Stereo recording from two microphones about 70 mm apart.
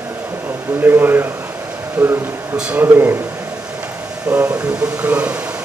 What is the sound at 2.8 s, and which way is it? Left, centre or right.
Speech, right.